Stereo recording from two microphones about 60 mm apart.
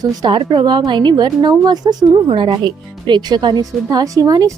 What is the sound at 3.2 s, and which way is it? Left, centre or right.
A woman's voice, right.